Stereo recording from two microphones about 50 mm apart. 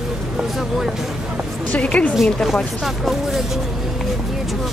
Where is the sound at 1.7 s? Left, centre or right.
Left.